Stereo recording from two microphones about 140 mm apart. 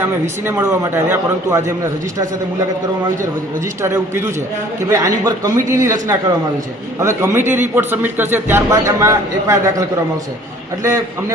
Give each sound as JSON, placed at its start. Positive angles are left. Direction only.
{"t": 0.0, "sound": "a man's voice", "side_deg": -15}
{"t": 3.8, "sound": "a man's voice", "side_deg": -20}
{"t": 10.8, "sound": "a man's voice", "side_deg": -25}